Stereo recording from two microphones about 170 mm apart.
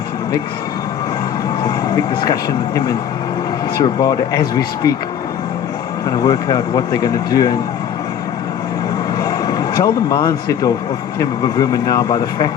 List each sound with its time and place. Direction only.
2.2 s speech: 20° left (ahead or behind)
6.1 s speech: 20° left (ahead or behind)
9.2 s speech: 20° left (ahead or behind)